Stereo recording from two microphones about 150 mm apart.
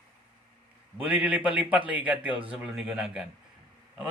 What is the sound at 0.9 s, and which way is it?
A man's voice, 10° right (ahead or behind).